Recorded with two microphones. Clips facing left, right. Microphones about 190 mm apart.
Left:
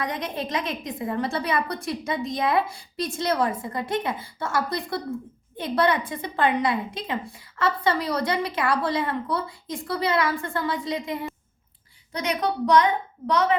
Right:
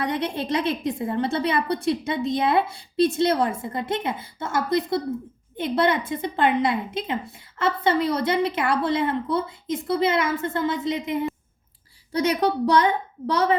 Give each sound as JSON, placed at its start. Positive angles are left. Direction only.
{"t": 0.0, "sound": "a woman's voice", "side_deg": -30}
{"t": 12.3, "sound": "a woman's voice", "side_deg": -30}